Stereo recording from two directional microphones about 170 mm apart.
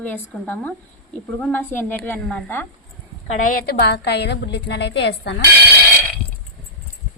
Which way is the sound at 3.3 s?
60° left (ahead or behind).